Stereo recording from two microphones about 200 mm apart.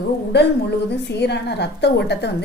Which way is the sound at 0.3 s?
55° left (ahead or behind).